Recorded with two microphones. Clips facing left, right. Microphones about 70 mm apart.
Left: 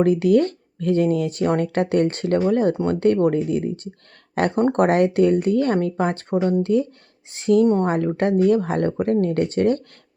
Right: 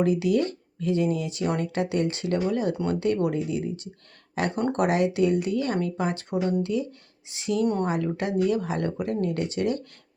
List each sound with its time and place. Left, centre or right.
0.0 s speech: left
4.5 s speech: left
7.6 s speech: left
7.9 s speech: left